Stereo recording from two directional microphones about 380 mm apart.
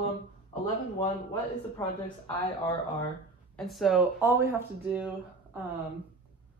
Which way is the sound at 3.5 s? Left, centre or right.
Centre.